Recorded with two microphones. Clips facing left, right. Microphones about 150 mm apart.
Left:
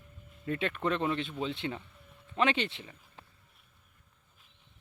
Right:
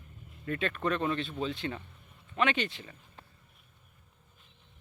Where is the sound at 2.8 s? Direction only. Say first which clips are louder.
Even; 10° left (ahead or behind).